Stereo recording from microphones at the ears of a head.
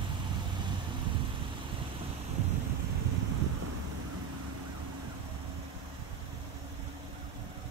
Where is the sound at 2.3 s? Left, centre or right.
Right.